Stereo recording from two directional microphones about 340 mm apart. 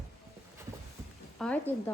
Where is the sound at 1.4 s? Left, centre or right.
Centre.